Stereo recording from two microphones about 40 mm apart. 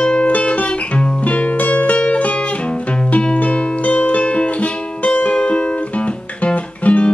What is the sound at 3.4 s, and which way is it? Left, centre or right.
Music, left.